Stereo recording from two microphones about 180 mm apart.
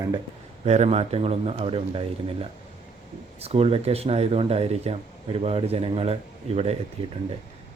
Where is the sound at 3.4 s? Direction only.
35° right (ahead or behind).